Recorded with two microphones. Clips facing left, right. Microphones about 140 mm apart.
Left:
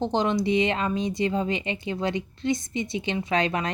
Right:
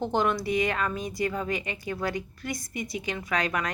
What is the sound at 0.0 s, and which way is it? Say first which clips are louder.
A woman's voice: left 2 dB; 20° left (ahead or behind).